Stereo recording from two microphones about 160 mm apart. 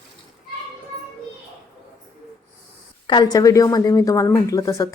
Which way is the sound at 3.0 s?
25° left (ahead or behind).